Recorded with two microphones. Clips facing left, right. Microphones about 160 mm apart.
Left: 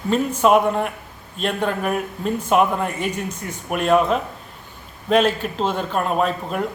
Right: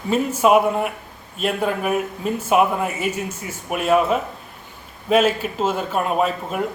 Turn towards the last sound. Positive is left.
turn(degrees=-5)  # may be behind; listen again after turning